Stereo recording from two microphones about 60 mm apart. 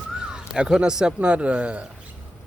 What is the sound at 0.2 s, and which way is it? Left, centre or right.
Speech, centre.